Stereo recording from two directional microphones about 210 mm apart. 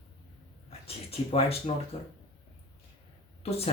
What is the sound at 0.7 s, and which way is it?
Speech, 30° left (ahead or behind).